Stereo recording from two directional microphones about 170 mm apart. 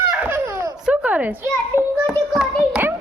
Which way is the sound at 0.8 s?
10° right (ahead or behind).